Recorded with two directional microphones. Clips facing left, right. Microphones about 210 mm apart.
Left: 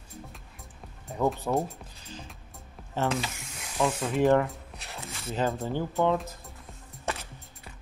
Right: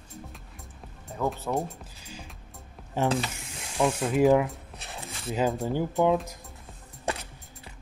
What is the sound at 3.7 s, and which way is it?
Speech, 10° right (ahead or behind).